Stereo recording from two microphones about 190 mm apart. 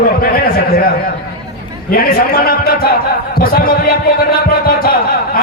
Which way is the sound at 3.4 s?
55° left (ahead or behind).